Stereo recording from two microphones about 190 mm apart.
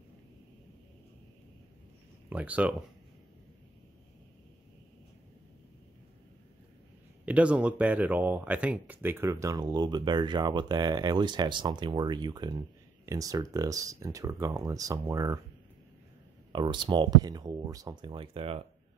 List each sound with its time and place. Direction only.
2.2 s speech: 10° right (ahead or behind)
7.2 s speech: 5° right (ahead or behind)
16.5 s speech: 25° right (ahead or behind)